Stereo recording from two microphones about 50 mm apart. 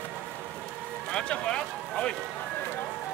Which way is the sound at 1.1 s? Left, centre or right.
Left.